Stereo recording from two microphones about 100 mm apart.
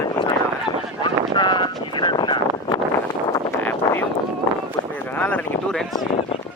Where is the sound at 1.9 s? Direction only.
50° left (ahead or behind).